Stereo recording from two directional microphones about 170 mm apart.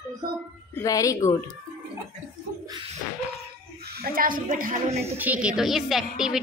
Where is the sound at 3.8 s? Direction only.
65° right (ahead or behind).